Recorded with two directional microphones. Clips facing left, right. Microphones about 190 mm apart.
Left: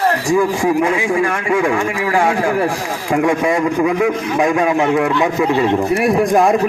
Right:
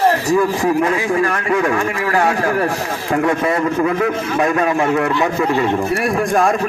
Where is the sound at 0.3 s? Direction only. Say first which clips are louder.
Left 1 dB; 10° left (ahead or behind).